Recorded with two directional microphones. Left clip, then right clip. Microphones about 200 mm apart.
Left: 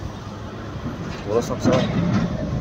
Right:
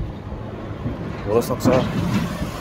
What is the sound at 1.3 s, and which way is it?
Speech, 15° right (ahead or behind).